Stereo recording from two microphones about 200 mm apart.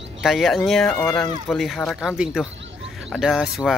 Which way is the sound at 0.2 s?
Centre (ahead or behind).